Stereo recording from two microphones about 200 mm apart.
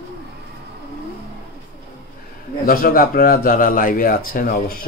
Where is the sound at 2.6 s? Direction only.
45° left (ahead or behind).